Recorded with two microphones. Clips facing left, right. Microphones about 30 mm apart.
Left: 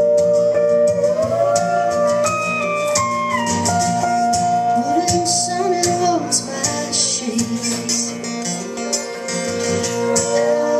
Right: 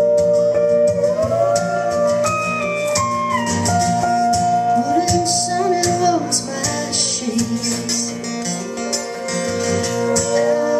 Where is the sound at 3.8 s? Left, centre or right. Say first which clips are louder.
Right 2 dB; centre.